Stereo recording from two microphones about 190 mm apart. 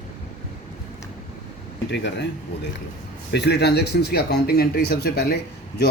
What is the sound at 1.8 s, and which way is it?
Speech, 70° left (ahead or behind).